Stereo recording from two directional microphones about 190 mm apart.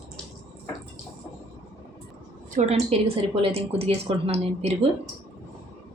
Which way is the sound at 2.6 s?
40° right (ahead or behind).